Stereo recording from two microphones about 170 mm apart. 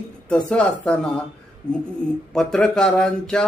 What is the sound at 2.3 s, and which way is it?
Speech, 5° left (ahead or behind).